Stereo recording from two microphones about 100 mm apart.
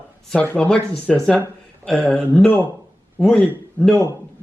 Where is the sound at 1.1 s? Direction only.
Centre (ahead or behind).